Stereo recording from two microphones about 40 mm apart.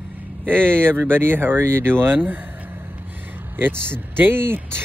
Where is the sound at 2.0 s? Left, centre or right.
Right.